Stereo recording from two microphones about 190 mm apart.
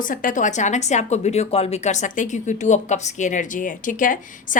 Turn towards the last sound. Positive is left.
turn(degrees=45)  # may be behind; listen again after turning